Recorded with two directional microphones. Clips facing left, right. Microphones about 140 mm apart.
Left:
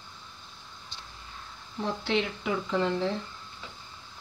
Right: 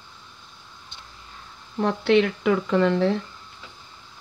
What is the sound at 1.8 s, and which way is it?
Speech, 65° right (ahead or behind).